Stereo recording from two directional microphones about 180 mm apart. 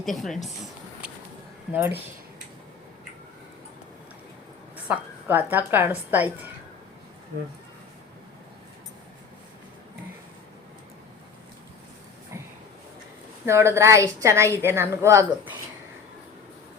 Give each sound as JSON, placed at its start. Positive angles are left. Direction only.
{"t": 0.0, "sound": "speech", "side_deg": 0}
{"t": 0.4, "sound": "a sound", "side_deg": 0}
{"t": 1.7, "sound": "a woman's voice", "side_deg": -10}
{"t": 4.9, "sound": "a woman's voice", "side_deg": -10}
{"t": 13.4, "sound": "a woman's voice", "side_deg": -15}